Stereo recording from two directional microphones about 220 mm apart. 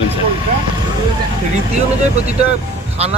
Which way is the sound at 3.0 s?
30° right (ahead or behind).